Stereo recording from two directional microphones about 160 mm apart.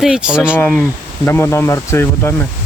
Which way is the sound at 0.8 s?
15° left (ahead or behind).